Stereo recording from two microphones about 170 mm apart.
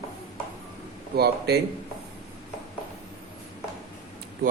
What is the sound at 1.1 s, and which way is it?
Speech, 70° right (ahead or behind).